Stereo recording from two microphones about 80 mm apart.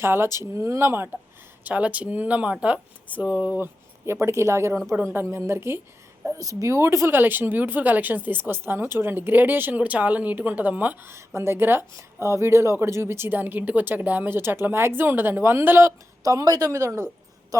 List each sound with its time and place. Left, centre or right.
0.0 s speech: right
1.6 s speech: centre
6.3 s speech: right; by 11.1 s centre
11.3 s speech: right
16.2 s speech: right
17.5 s a sound: right